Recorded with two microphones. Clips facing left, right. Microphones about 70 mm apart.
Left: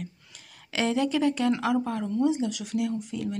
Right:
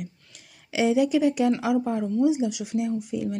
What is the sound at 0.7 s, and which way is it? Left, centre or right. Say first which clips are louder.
A woman's voice: right 4 dB; centre.